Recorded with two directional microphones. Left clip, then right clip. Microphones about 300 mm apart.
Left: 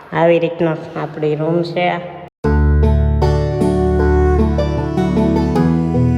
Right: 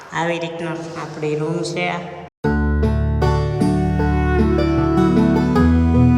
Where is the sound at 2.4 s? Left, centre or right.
Centre.